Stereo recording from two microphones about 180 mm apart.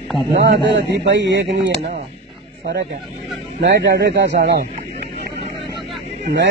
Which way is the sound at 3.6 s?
65° right (ahead or behind).